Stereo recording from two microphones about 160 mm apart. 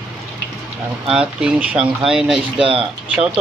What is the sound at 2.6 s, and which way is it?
Speech, 35° right (ahead or behind).